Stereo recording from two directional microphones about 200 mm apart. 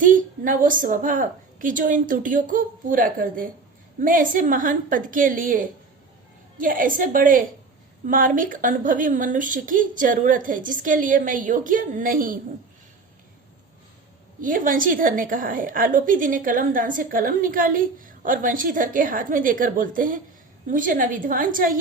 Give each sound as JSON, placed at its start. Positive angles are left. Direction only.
{"t": 0.0, "sound": "a woman's voice", "side_deg": -40}
{"t": 14.4, "sound": "a woman's voice", "side_deg": -40}